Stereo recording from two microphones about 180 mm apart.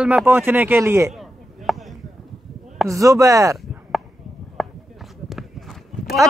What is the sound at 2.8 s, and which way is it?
Speech, 15° right (ahead or behind).